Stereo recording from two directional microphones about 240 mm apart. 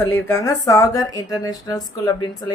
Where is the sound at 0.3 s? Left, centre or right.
Centre.